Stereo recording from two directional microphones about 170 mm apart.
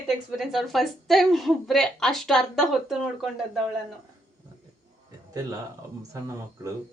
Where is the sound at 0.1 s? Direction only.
Centre (ahead or behind).